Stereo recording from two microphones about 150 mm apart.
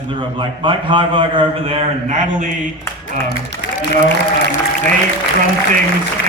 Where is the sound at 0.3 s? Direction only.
35° right (ahead or behind); by 2.5 s 50° right (ahead or behind).